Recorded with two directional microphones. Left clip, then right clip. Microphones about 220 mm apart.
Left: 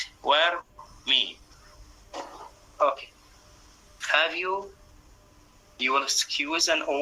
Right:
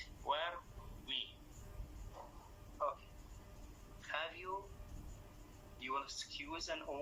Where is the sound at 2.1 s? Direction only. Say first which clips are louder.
Left 18 dB; 50° left (ahead or behind).